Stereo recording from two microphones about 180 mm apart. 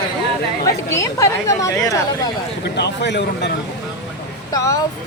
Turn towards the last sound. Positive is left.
turn(degrees=20)  # may be behind; listen again after turning